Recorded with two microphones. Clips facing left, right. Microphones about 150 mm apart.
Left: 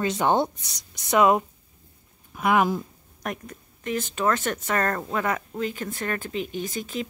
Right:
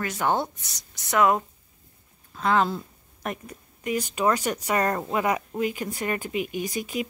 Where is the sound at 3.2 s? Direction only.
5° right (ahead or behind).